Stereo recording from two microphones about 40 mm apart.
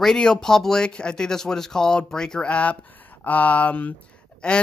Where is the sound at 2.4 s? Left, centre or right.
Left.